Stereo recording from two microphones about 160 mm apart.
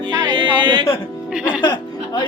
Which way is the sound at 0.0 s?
30° right (ahead or behind).